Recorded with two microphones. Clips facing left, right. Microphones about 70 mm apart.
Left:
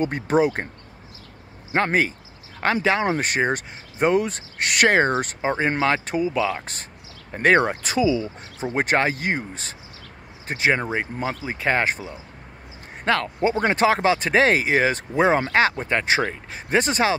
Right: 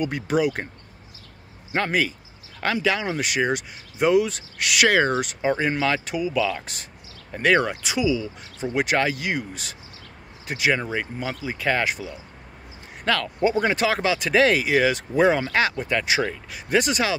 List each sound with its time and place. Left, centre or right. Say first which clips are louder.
0.0 s speech: left 3 dB; left
1.7 s speech: left 2 dB; left